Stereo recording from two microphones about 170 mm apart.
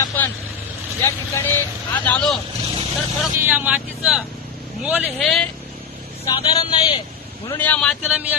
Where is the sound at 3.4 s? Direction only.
10° right (ahead or behind).